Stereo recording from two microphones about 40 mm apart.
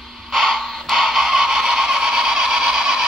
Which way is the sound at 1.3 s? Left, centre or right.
Centre.